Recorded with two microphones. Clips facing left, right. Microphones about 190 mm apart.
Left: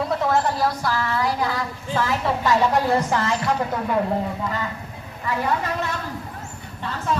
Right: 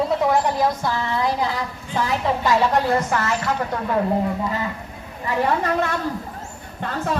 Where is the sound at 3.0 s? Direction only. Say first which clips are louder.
Even; 15° left (ahead or behind).